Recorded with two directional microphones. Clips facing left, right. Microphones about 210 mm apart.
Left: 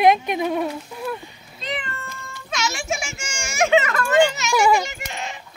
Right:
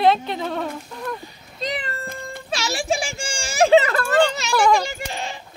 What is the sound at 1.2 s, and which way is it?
Speech, 35° right (ahead or behind).